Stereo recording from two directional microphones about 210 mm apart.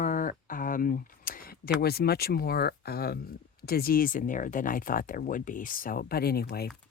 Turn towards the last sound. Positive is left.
turn(degrees=50)  # may be behind; listen again after turning